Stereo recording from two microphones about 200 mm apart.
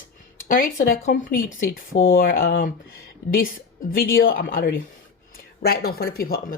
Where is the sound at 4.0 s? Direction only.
45° left (ahead or behind).